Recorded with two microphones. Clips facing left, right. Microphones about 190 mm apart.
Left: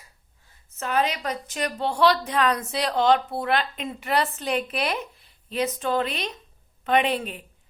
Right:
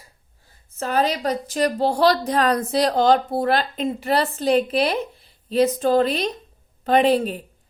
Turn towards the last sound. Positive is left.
turn(degrees=-35)  # may be behind; listen again after turning